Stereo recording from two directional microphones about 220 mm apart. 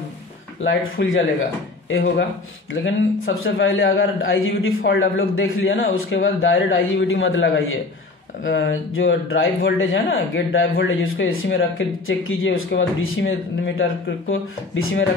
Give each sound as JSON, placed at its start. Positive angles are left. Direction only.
{"t": 0.7, "sound": "speech", "side_deg": 55}